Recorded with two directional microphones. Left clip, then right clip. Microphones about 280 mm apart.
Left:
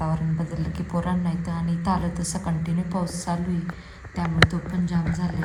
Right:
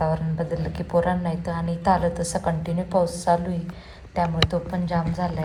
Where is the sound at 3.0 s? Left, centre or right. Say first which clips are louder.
Right 8 dB; centre.